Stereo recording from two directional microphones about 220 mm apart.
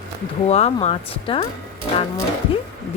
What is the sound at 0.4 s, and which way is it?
Speech, 30° left (ahead or behind).